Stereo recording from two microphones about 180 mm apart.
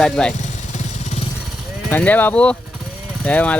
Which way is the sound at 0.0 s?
5° left (ahead or behind).